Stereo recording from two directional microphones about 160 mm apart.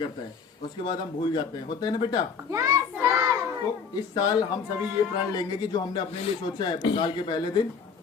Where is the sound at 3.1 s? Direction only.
15° right (ahead or behind).